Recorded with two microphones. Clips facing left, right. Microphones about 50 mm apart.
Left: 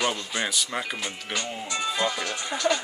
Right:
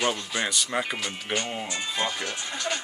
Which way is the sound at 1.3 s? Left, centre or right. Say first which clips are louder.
Right 2 dB; right.